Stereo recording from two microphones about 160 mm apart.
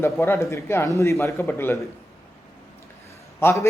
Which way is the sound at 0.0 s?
15° left (ahead or behind).